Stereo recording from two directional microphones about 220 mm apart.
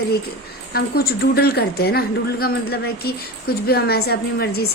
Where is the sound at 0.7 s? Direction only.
45° left (ahead or behind).